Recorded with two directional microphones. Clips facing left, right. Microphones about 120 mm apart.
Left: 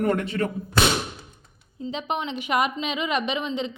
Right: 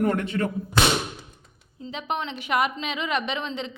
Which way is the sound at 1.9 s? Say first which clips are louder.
Left 1 dB; 20° left (ahead or behind).